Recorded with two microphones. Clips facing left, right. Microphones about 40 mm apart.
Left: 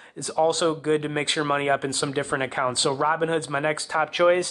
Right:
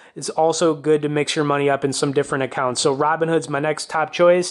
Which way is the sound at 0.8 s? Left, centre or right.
Left.